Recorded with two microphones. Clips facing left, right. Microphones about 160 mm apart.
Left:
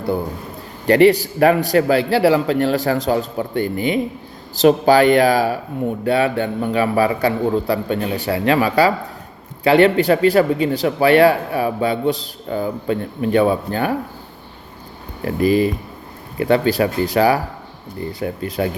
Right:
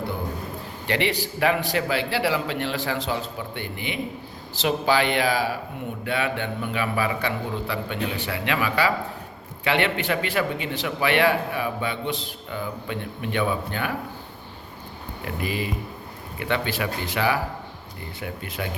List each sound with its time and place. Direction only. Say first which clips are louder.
0.9 s speech: left 13 dB; 40° left (ahead or behind)
15.2 s speech: left 13 dB; 40° left (ahead or behind)